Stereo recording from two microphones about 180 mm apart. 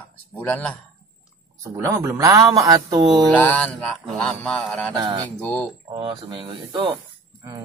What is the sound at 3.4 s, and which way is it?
Mantra, 5° left (ahead or behind).